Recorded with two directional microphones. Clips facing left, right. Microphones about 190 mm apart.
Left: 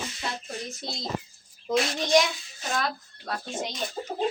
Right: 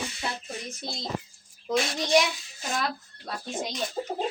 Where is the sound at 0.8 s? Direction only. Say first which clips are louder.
Even; centre (ahead or behind).